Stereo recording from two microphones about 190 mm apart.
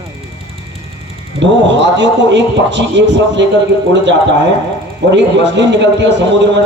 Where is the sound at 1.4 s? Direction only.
70° right (ahead or behind).